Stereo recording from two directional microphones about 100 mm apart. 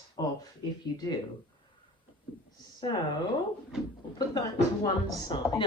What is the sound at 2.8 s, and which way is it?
Speech, 45° left (ahead or behind).